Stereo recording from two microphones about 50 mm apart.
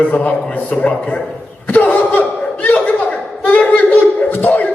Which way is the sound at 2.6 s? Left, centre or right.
Left.